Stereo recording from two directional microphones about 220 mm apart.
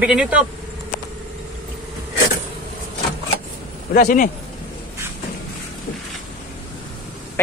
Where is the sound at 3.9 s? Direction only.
35° left (ahead or behind).